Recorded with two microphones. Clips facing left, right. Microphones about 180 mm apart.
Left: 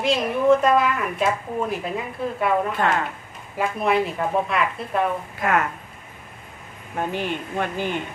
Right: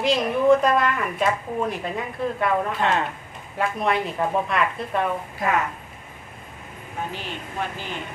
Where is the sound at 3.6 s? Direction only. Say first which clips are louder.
Left 2 dB; 5° left (ahead or behind).